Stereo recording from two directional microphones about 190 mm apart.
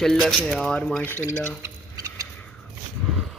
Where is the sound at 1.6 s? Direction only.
15° right (ahead or behind).